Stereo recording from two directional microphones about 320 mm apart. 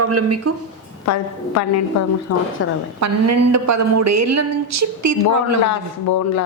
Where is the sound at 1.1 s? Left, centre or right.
Left.